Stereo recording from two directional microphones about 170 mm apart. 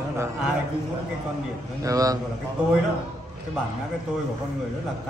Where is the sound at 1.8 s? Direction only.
20° right (ahead or behind).